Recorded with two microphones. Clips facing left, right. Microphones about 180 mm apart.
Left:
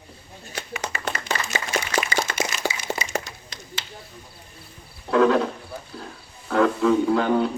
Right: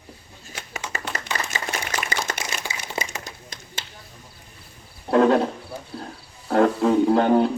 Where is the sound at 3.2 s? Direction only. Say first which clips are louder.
Even; 45° right (ahead or behind).